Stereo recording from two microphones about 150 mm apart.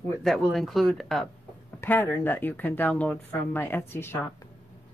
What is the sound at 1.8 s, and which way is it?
Speech, 15° left (ahead or behind).